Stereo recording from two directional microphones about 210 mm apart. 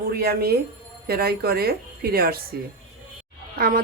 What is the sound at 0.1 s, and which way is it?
Speech, 45° right (ahead or behind).